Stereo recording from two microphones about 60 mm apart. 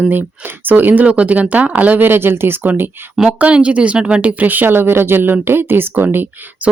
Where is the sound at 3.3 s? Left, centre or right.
Right.